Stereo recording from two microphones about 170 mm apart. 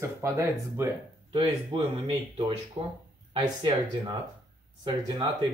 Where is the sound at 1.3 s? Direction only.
30° right (ahead or behind).